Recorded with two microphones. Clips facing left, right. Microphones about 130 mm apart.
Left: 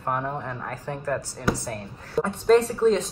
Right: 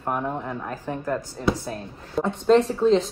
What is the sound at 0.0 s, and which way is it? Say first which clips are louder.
A woman's voice: right 1 dB; 10° right (ahead or behind).